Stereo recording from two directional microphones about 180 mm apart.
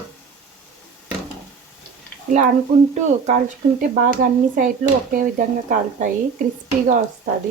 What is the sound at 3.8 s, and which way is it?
Speech, 50° right (ahead or behind).